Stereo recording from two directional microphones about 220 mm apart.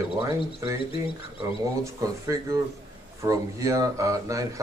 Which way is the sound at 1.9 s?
15° right (ahead or behind).